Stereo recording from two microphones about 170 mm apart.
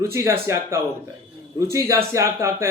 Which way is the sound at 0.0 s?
15° right (ahead or behind).